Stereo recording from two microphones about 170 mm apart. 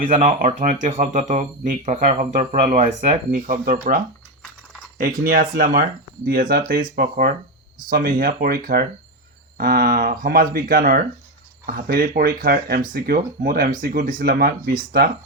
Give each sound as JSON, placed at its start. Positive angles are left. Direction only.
{"t": 0.0, "sound": "speech", "side_deg": -50}
{"t": 4.9, "sound": "speech", "side_deg": -55}